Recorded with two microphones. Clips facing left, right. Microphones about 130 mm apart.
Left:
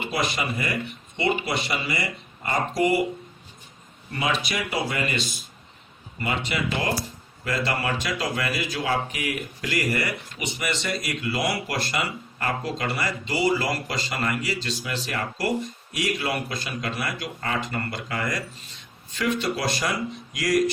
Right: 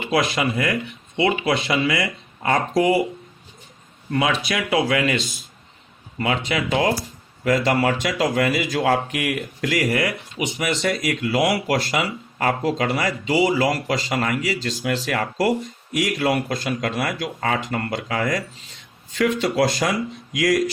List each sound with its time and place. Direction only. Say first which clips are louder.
0.1 s speech: right 8 dB; 90° right
4.1 s speech: right 5 dB; 90° right
6.2 s speech: right 4 dB; 80° right
14.8 s speech: right 9 dB; 70° right (ahead or behind)
20.3 s speech: right 5 dB; 90° right